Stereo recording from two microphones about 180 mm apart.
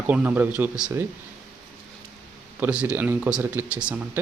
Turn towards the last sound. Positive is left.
turn(degrees=-5)  # may be behind; listen again after turning